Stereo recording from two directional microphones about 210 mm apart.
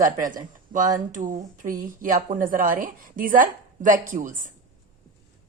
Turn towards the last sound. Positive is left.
turn(degrees=-40)  # may be behind; listen again after turning